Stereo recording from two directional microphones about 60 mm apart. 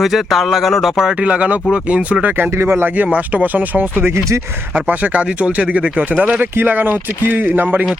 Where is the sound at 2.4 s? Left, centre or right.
Right.